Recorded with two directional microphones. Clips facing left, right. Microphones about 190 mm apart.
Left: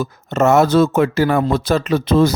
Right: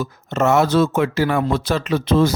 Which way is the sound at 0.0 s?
45° left (ahead or behind).